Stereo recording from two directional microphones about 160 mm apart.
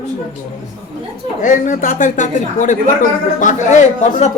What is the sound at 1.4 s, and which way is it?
A woman's voice, 55° left (ahead or behind).